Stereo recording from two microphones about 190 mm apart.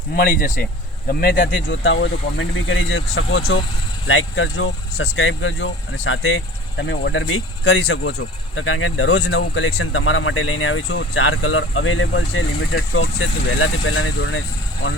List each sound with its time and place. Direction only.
0.1 s speech: 50° left (ahead or behind); by 14.4 s 85° left